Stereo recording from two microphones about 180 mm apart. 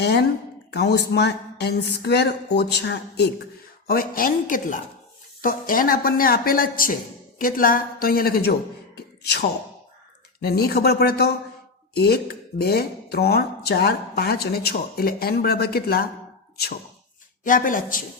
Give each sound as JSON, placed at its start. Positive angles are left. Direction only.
{"t": 0.0, "sound": "speech", "side_deg": 65}
{"t": 3.8, "sound": "a woman's voice", "side_deg": 55}
{"t": 17.4, "sound": "a woman's voice", "side_deg": 50}